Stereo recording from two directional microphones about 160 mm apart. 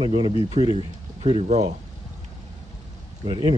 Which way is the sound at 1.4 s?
45° right (ahead or behind).